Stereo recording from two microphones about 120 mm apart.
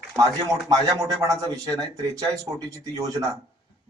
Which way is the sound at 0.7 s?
30° right (ahead or behind).